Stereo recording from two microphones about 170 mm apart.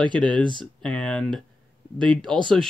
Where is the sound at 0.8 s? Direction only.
5° left (ahead or behind).